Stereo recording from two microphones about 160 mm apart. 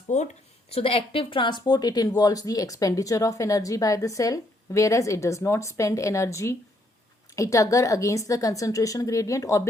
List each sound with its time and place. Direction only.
0.1 s speech: 45° left (ahead or behind)
0.7 s speech: 35° left (ahead or behind); by 9.6 s 20° left (ahead or behind)